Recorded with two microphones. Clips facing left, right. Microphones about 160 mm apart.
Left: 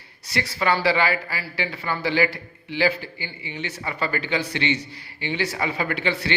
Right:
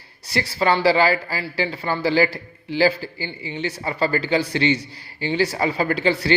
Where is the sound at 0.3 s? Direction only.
30° right (ahead or behind).